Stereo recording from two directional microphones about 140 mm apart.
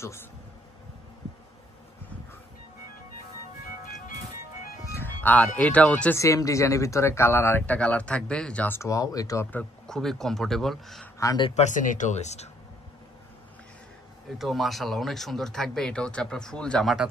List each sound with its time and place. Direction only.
0.0 s speech: 20° left (ahead or behind)
4.8 s music: 15° left (ahead or behind)
5.6 s speech: 10° left (ahead or behind)
6.1 s speech: 25° left (ahead or behind)
9.5 s speech: 10° left (ahead or behind)
11.1 s speech: 25° left (ahead or behind)
11.5 s speech: 60° left (ahead or behind)
14.4 s speech: centre (ahead or behind)